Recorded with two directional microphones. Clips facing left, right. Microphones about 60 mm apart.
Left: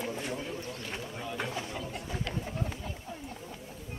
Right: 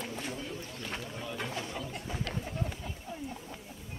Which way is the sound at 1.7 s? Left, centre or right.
Centre.